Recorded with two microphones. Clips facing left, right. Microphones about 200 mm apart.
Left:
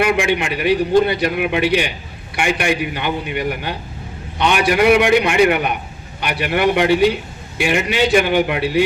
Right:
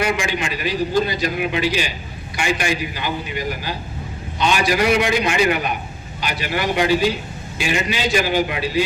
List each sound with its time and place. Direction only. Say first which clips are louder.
0.0 s a man's voice: left 5 dB; 60° left (ahead or behind)